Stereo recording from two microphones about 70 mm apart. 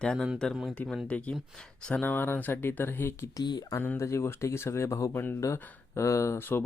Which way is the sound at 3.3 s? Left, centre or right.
Left.